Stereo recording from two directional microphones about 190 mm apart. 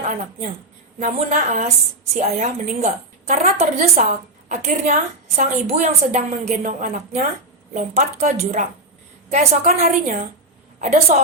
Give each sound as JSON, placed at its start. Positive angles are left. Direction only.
{"t": 0.9, "sound": "a woman's voice", "side_deg": -40}